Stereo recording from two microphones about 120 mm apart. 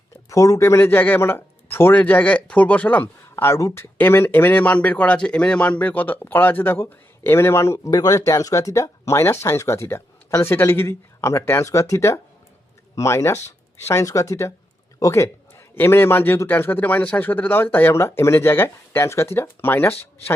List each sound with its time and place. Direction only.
0.3 s a man's voice: 25° left (ahead or behind)